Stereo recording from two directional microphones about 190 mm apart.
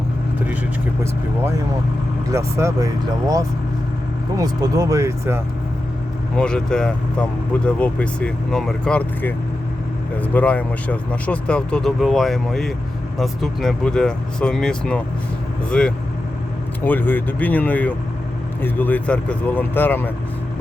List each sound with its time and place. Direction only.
2.3 s speech: 15° right (ahead or behind)
6.3 s speech: 5° left (ahead or behind)